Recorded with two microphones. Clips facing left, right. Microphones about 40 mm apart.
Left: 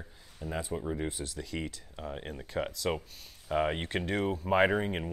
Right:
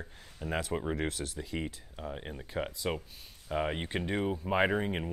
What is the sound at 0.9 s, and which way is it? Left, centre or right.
Speech, right.